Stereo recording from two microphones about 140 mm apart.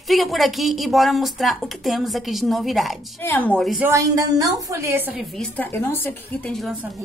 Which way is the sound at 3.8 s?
20° right (ahead or behind).